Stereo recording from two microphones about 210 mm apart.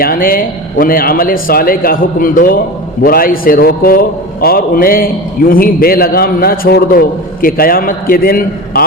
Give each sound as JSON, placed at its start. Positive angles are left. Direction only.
{"t": 0.0, "sound": "speech", "side_deg": 45}